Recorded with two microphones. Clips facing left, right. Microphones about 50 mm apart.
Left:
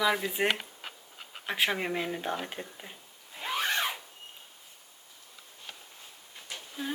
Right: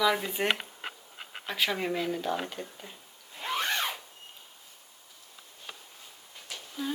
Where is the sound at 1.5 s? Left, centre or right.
Left.